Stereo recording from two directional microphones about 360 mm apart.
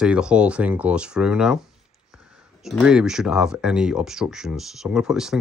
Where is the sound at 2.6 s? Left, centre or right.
Centre.